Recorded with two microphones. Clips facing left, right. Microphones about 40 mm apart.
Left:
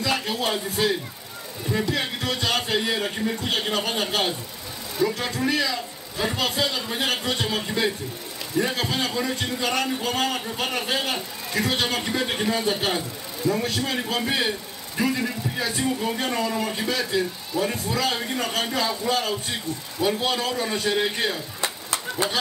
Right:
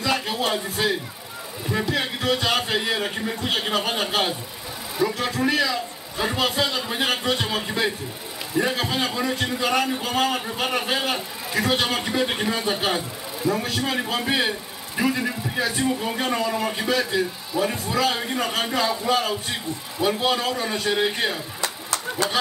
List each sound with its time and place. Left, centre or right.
0.0 s music: centre
1.7 s a man's voice: centre
21.5 s a sound: left